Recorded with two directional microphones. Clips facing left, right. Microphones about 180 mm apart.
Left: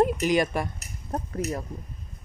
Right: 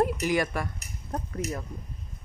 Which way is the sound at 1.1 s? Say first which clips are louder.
Left 3 dB; 35° left (ahead or behind).